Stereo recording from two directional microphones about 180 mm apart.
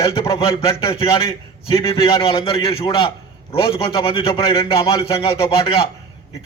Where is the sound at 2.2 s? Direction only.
30° left (ahead or behind).